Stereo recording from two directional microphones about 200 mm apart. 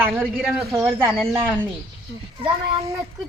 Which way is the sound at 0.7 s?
10° right (ahead or behind).